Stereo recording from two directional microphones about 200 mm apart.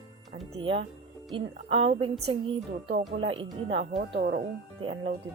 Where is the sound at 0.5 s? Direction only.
25° right (ahead or behind).